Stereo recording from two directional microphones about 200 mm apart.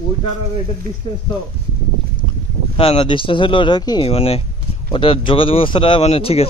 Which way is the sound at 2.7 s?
25° left (ahead or behind).